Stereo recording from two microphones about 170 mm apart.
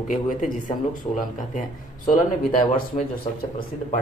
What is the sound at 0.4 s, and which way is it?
A man's voice, 50° left (ahead or behind).